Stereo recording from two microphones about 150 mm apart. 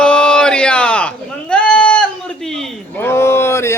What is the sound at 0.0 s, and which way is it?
Sheep, 5° left (ahead or behind).